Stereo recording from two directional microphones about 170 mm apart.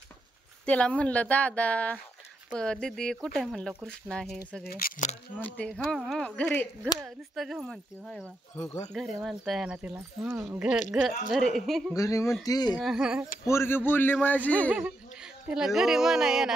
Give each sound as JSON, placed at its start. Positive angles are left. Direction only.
{"t": 0.7, "sound": "speech", "side_deg": 5}
{"t": 4.6, "sound": "speech", "side_deg": 60}
{"t": 5.3, "sound": "speech", "side_deg": 10}
{"t": 11.9, "sound": "speech", "side_deg": 20}
{"t": 12.7, "sound": "speech", "side_deg": 0}
{"t": 13.5, "sound": "speech", "side_deg": 15}
{"t": 14.7, "sound": "speech", "side_deg": -5}